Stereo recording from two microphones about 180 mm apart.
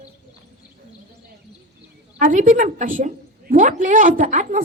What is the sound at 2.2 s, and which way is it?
A woman's voice, 45° right (ahead or behind).